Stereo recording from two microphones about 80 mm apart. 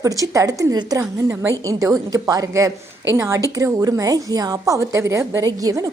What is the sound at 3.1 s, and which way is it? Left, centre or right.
A woman's voice, right.